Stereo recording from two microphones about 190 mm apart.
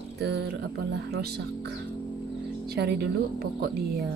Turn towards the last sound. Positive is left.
turn(degrees=-55)  # may be behind; listen again after turning